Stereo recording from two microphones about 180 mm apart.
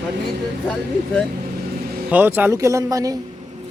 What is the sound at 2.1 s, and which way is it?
Speech, 10° right (ahead or behind).